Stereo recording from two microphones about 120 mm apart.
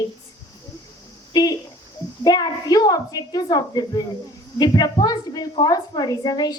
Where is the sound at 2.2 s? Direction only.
35° left (ahead or behind).